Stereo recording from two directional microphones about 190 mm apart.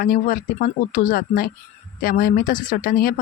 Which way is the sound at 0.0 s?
50° left (ahead or behind).